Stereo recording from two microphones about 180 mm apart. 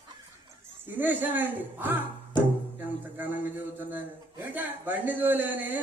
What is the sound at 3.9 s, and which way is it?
Speech, 10° right (ahead or behind).